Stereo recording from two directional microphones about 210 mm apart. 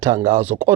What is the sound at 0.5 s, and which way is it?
Speech, 25° right (ahead or behind).